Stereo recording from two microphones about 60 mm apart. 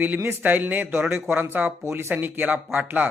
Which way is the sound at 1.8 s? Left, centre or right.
Right.